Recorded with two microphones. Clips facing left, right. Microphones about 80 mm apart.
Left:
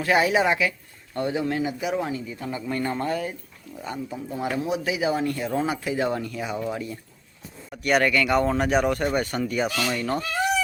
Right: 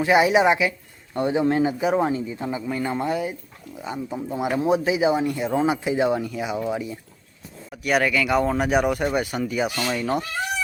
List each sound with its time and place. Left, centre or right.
0.0 s speech: centre
2.6 s speech: centre
7.7 s speech: centre